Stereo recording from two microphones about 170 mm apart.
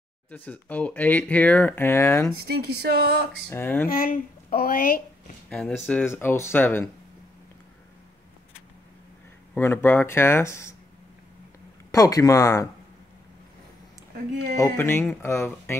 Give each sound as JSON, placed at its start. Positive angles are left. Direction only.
{"t": 0.3, "sound": "speech", "side_deg": 10}
{"t": 2.4, "sound": "a sound", "side_deg": -70}
{"t": 3.4, "sound": "speech", "side_deg": 10}
{"t": 3.8, "sound": "speech", "side_deg": 55}
{"t": 5.5, "sound": "speech", "side_deg": 5}
{"t": 9.5, "sound": "speech", "side_deg": 15}
{"t": 11.9, "sound": "speech", "side_deg": 20}
{"t": 14.6, "sound": "speech", "side_deg": 15}